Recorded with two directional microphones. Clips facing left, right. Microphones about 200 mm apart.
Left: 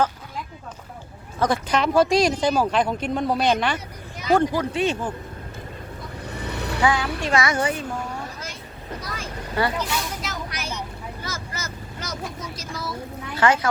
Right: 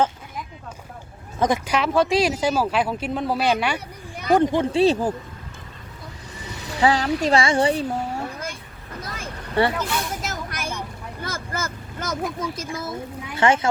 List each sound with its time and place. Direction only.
1.4 s speech: 15° right (ahead or behind)
4.4 s speech: 25° right (ahead or behind)
6.2 s vehicle: 60° left (ahead or behind)
6.8 s speech: 35° right (ahead or behind)
8.3 s a sound: 55° right (ahead or behind)
9.0 s vehicle: 50° right (ahead or behind)
13.3 s speech: 25° right (ahead or behind)